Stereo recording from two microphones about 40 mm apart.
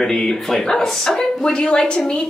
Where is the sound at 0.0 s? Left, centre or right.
Centre.